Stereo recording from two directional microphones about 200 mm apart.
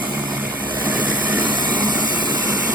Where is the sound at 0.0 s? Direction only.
10° right (ahead or behind).